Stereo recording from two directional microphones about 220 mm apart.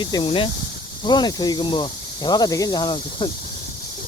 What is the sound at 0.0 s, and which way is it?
Speech, 20° left (ahead or behind).